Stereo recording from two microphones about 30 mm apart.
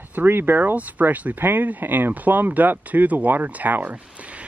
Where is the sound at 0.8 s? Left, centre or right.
Right.